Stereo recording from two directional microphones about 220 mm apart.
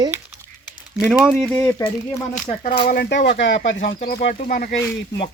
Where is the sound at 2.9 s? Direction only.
45° left (ahead or behind).